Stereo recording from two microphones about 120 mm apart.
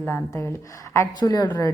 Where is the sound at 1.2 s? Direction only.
35° left (ahead or behind).